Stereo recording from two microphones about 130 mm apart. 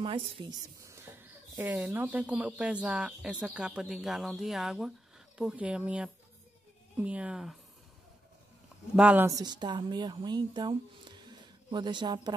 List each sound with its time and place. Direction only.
0.0 s a woman's voice: 45° right (ahead or behind)
0.5 s whispering: 25° right (ahead or behind)
1.9 s speech: 15° right (ahead or behind)
8.9 s speech: 10° right (ahead or behind)
9.3 s speech: 30° right (ahead or behind)